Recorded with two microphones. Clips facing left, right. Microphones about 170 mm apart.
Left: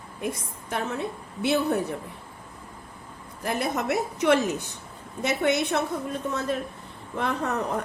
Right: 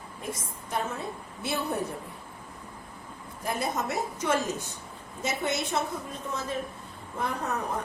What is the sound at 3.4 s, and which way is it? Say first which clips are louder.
A woman's voice: left 3 dB; 65° left (ahead or behind).